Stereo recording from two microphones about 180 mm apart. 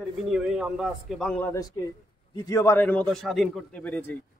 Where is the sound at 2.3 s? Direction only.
20° left (ahead or behind).